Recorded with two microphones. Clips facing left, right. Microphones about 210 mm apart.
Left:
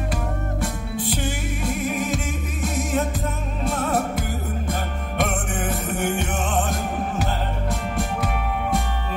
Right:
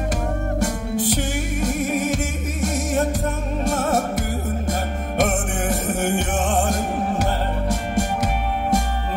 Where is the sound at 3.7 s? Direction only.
45° right (ahead or behind).